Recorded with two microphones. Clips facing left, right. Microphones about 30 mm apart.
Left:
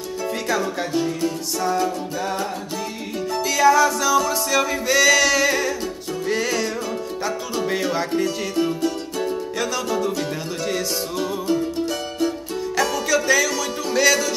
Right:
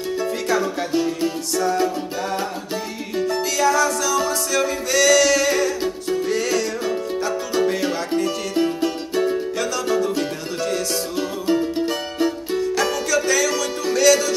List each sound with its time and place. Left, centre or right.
0.5 s music: centre
3.5 s music: centre
11.5 s music: right
12.5 s music: centre
13.1 s music: centre